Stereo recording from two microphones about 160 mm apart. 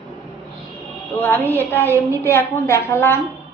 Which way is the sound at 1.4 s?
10° left (ahead or behind).